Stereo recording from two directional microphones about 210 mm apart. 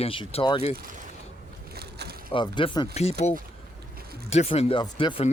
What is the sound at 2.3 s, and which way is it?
Speech, 25° left (ahead or behind).